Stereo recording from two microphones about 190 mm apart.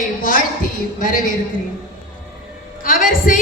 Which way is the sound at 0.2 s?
45° left (ahead or behind).